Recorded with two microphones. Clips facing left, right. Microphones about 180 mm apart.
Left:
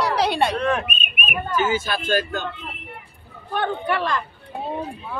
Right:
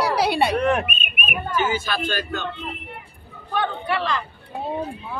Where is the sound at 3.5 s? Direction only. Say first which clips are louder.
Left 1 dB; 50° left (ahead or behind).